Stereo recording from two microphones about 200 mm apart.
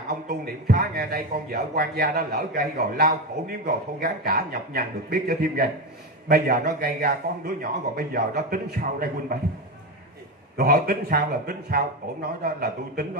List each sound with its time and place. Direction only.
0.7 s a man's voice: 50° right (ahead or behind)
10.6 s a man's voice: 50° right (ahead or behind)